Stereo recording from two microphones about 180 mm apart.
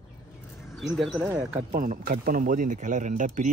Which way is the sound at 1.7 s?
50° right (ahead or behind).